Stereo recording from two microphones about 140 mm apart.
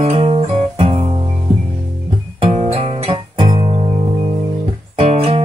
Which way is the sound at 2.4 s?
40° right (ahead or behind).